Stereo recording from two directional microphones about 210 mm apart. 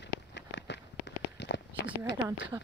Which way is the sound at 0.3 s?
55° left (ahead or behind).